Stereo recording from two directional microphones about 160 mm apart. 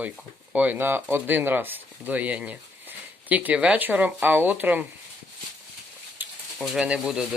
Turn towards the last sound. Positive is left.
turn(degrees=-5)  # may be behind; listen again after turning